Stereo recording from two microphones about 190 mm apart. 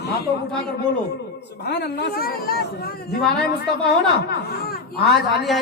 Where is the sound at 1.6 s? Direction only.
60° left (ahead or behind).